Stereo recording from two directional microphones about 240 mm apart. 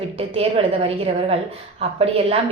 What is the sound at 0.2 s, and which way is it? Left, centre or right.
A woman's voice, right.